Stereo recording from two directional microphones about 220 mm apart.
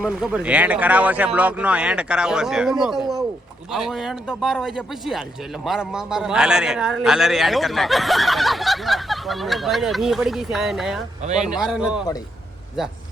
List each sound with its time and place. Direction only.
0.0 s a man's voice: 5° right (ahead or behind)